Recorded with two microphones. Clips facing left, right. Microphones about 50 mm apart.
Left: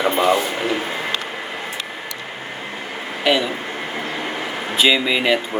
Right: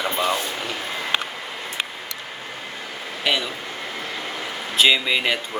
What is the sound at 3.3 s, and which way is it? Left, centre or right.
Speech, centre.